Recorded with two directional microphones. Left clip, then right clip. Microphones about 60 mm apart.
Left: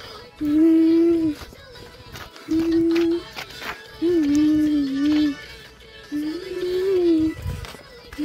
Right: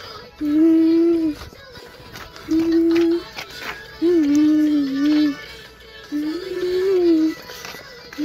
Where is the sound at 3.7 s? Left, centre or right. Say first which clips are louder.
Right 3 dB; centre.